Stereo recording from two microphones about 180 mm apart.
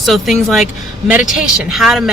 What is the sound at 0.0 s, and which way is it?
Speech, centre (ahead or behind).